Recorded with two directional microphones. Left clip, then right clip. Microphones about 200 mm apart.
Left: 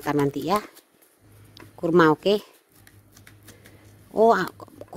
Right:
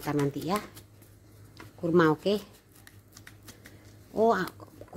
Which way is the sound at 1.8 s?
35° left (ahead or behind).